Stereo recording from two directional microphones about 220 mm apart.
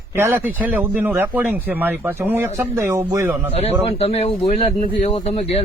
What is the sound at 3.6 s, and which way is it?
Speech, 30° left (ahead or behind).